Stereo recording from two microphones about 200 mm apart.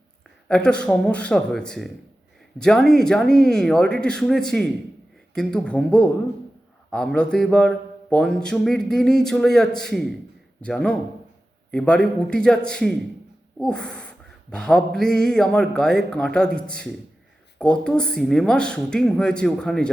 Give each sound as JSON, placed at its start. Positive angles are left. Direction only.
{"t": 0.4, "sound": "speech", "side_deg": 5}